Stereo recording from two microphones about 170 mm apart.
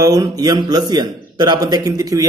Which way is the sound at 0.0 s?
20° right (ahead or behind).